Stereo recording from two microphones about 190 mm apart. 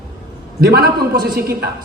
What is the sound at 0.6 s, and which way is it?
Speech, 55° right (ahead or behind).